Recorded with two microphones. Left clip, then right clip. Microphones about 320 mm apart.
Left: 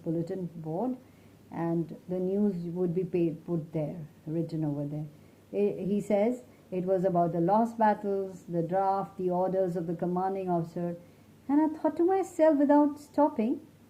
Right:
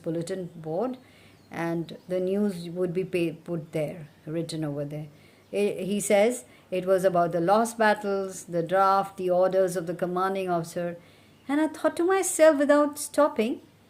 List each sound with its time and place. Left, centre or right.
1.5 s a woman's voice: right